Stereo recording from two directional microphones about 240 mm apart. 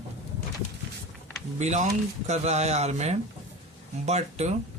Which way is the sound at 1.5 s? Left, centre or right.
Right.